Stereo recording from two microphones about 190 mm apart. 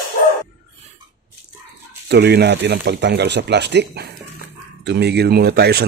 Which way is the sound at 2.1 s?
60° right (ahead or behind).